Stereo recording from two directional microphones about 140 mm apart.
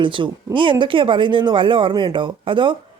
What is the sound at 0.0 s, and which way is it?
Speech, 35° right (ahead or behind).